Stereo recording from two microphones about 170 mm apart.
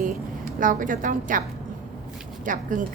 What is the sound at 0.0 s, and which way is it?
A woman's voice, 50° right (ahead or behind).